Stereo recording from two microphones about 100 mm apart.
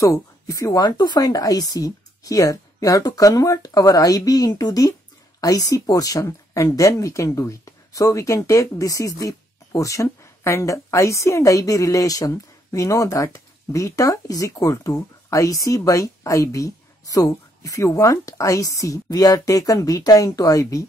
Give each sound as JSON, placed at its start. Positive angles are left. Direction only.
{"t": 0.0, "sound": "speech", "side_deg": 35}